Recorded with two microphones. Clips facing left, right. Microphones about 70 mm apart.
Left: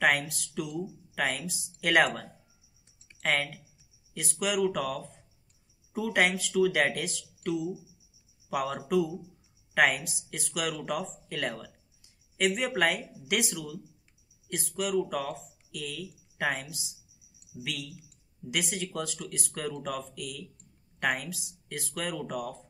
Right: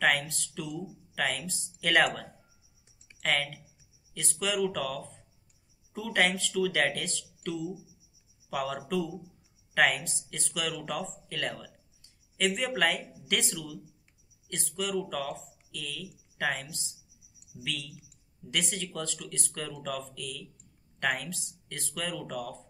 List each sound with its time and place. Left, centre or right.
0.0 s speech: centre